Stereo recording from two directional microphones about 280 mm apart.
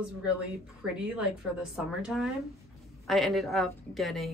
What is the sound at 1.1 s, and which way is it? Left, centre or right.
Speech, centre.